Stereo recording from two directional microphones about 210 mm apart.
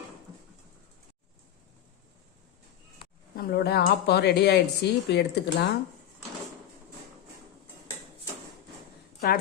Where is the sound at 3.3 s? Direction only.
45° left (ahead or behind).